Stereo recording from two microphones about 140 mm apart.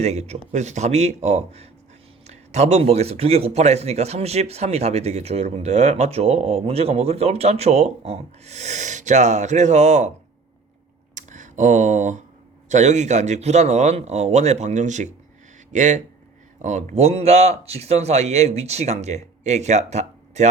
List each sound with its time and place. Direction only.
0.0 s speech: 50° right (ahead or behind)
11.1 s a sound: 60° right (ahead or behind)
12.6 s a man's voice: 55° right (ahead or behind)